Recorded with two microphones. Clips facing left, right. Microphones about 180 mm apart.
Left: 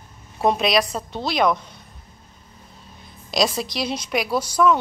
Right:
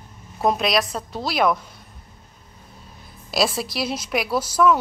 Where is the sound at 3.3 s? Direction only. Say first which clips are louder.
Left 1 dB; 5° right (ahead or behind).